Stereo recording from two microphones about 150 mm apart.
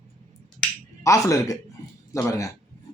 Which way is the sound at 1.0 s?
20° left (ahead or behind).